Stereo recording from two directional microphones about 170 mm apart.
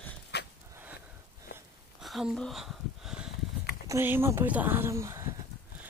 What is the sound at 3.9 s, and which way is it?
Speech, 15° right (ahead or behind).